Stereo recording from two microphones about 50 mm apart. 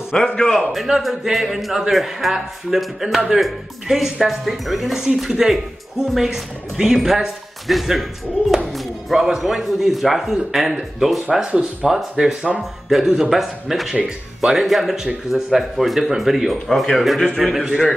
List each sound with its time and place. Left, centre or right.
0.1 s a man's voice: centre
0.8 s speech: centre
11.4 s speech: right
11.9 s speech: centre